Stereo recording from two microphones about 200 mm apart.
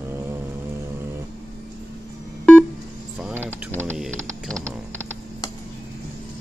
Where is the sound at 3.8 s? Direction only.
Centre (ahead or behind).